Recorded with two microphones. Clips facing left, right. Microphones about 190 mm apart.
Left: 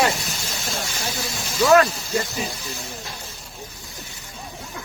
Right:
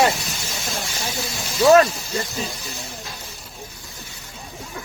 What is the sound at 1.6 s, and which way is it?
Speech, 25° right (ahead or behind).